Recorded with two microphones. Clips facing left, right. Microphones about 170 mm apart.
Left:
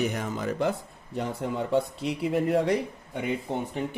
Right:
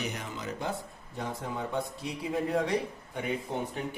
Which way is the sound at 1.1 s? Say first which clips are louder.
Left 6 dB; 75° left (ahead or behind).